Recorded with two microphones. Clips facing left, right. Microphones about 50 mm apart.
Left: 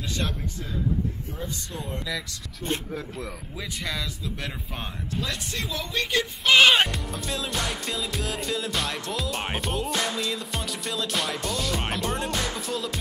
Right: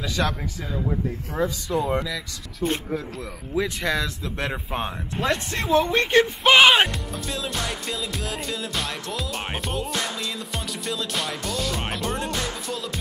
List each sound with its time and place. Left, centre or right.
1.3 s speech: right
3.5 s speech: centre
4.4 s speech: right
5.2 s speech: right
6.7 s music: centre